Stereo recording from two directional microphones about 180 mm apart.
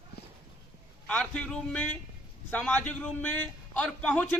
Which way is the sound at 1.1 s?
5° left (ahead or behind).